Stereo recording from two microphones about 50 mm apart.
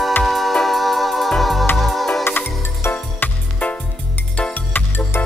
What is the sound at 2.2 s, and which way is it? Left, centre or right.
Music, left.